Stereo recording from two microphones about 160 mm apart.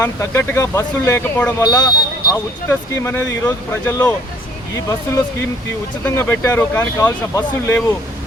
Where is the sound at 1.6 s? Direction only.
25° left (ahead or behind).